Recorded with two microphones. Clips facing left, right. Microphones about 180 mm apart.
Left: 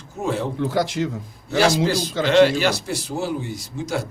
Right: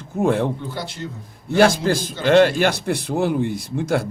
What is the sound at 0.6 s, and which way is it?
Speech, 90° left.